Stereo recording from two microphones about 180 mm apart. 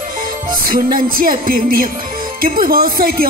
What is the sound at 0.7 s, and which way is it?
Speech, 50° right (ahead or behind).